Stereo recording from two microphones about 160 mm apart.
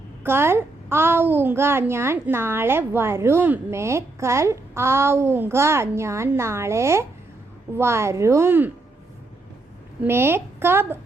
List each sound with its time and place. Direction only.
0.2 s a child's voice: 15° right (ahead or behind)
10.0 s a child's voice: 15° right (ahead or behind)